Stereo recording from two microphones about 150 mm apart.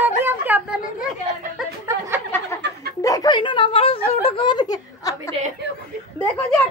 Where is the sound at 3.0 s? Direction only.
25° left (ahead or behind).